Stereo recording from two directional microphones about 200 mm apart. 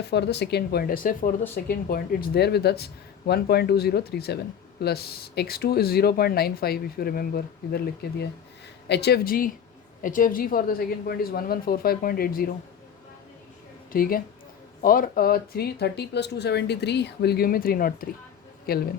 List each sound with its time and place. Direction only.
0.1 s speech: 55° left (ahead or behind)
13.9 s speech: 45° left (ahead or behind)